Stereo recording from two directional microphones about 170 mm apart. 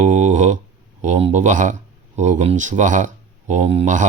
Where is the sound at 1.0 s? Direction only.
40° right (ahead or behind).